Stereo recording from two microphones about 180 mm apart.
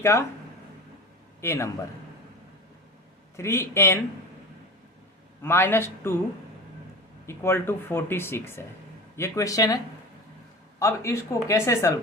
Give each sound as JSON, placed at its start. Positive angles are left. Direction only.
{"t": 0.0, "sound": "speech", "side_deg": 15}
{"t": 1.4, "sound": "a man's voice", "side_deg": 15}
{"t": 3.3, "sound": "speech", "side_deg": 15}
{"t": 5.4, "sound": "speech", "side_deg": 15}
{"t": 7.3, "sound": "speech", "side_deg": 15}